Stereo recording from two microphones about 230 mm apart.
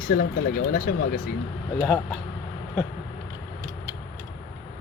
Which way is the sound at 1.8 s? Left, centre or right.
Centre.